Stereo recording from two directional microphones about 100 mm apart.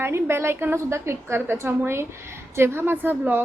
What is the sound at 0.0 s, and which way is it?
A woman's voice, 25° right (ahead or behind).